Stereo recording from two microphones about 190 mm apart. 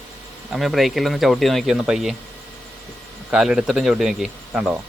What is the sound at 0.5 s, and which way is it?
A man's voice, centre (ahead or behind).